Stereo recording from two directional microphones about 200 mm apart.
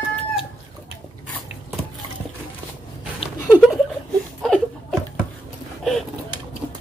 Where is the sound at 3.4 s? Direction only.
5° right (ahead or behind).